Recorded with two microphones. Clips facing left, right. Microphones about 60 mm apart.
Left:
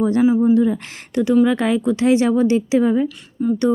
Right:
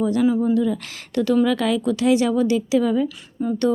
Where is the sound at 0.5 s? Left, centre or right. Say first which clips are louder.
Left 4 dB; left.